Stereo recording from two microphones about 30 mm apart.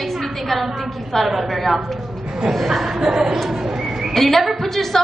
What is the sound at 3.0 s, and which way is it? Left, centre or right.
Speech, centre.